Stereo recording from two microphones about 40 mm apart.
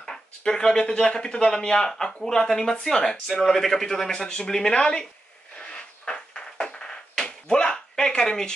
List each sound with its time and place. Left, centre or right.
0.0 s a man's voice: centre
6.0 s a sound: centre
7.2 s slap: left